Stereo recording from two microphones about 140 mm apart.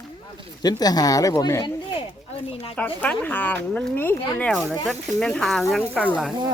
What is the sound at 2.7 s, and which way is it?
Speech, 10° left (ahead or behind).